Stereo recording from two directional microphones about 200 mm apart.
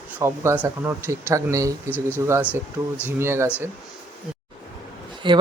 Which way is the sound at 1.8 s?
10° left (ahead or behind).